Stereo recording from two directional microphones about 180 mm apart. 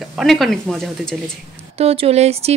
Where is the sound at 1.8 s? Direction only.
35° right (ahead or behind).